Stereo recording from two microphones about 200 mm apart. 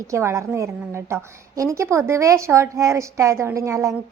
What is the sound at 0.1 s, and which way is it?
A woman's voice, 15° right (ahead or behind).